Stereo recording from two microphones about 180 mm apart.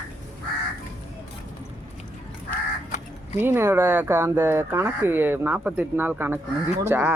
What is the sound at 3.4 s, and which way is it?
Speech, 10° right (ahead or behind).